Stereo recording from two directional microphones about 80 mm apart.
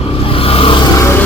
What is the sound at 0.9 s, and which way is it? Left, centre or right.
Music, left.